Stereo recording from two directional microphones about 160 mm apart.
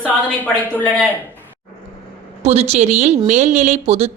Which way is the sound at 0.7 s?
10° left (ahead or behind).